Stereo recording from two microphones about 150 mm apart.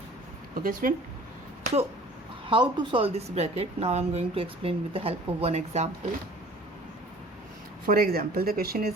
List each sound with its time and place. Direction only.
0.5 s speech: 70° right (ahead or behind)
2.5 s a woman's voice: 30° right (ahead or behind); by 5.9 s 50° right (ahead or behind)
7.9 s speech: 75° right (ahead or behind)